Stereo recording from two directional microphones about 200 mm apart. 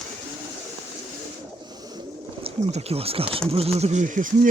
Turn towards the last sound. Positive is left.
turn(degrees=-40)  # may be behind; listen again after turning